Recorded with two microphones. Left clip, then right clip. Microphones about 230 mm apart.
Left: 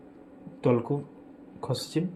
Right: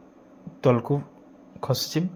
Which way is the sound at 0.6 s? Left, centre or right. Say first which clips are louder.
Right 4 dB; right.